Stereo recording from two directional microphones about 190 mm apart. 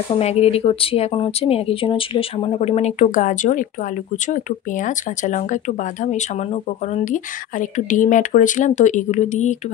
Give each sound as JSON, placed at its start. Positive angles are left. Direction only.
{"t": 0.2, "sound": "speech", "side_deg": 35}